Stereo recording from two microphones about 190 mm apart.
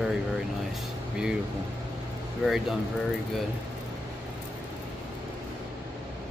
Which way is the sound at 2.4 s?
Centre (ahead or behind).